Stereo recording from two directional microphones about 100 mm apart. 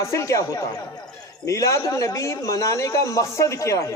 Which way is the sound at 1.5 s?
30° left (ahead or behind).